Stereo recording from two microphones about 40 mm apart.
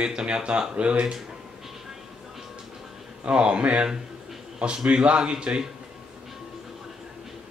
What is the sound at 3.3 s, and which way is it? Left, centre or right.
Speech, right.